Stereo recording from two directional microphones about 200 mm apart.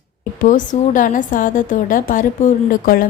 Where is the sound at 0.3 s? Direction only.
40° left (ahead or behind).